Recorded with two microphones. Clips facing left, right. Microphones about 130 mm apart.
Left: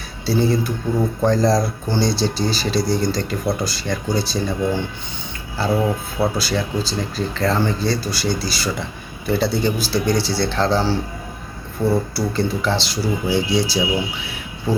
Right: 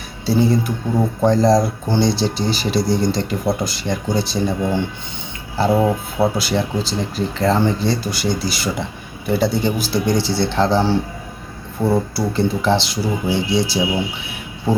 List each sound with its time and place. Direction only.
0.3 s speech: 20° right (ahead or behind)